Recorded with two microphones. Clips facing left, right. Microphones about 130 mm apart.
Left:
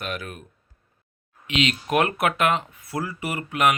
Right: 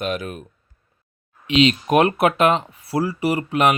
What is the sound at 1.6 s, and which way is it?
Speech, 20° right (ahead or behind).